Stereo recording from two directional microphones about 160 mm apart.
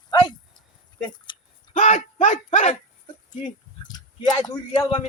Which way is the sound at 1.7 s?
50° left (ahead or behind).